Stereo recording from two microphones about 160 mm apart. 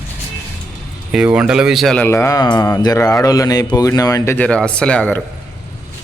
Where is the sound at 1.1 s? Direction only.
5° right (ahead or behind); by 5.2 s 10° left (ahead or behind).